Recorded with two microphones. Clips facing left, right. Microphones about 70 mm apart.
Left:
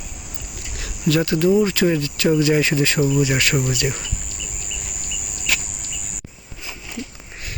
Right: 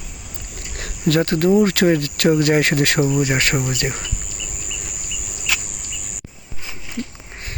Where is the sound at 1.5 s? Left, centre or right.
Right.